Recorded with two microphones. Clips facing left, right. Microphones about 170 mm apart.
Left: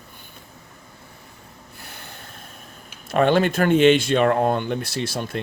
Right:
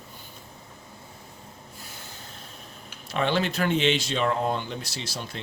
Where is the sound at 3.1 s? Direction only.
50° left (ahead or behind).